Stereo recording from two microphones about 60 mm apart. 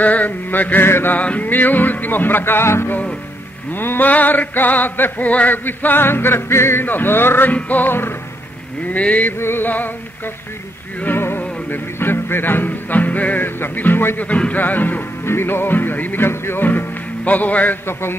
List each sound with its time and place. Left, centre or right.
0.0 s speech: left
0.8 s music: left
1.1 s music: left
7.5 s speech: left
9.4 s music: left
14.2 s speech: left
15.2 s music: left